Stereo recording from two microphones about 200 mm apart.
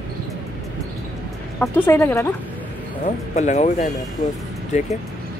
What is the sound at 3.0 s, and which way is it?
Speech, 35° left (ahead or behind).